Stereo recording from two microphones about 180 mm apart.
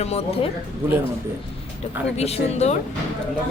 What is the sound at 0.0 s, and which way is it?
Speech, 35° left (ahead or behind).